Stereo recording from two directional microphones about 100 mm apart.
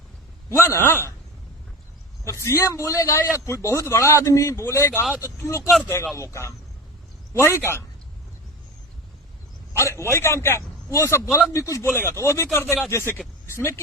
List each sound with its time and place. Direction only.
0.6 s a man's voice: 25° left (ahead or behind)
2.2 s a man's voice: 30° left (ahead or behind)
9.7 s a man's voice: 30° left (ahead or behind)